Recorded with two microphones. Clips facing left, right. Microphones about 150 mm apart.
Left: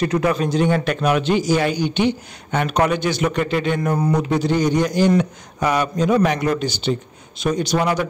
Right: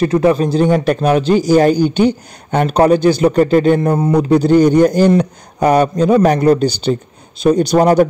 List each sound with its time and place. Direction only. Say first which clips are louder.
0.0 s a man's voice: right 7 dB; 30° right (ahead or behind)
3.9 s a man's voice: right 7 dB; 30° right (ahead or behind)
4.5 s a man's voice: right 10 dB; 55° right (ahead or behind)